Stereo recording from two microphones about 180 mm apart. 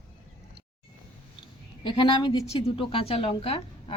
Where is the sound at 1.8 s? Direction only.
25° left (ahead or behind).